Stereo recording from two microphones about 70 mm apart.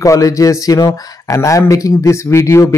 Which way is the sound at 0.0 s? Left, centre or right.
Left.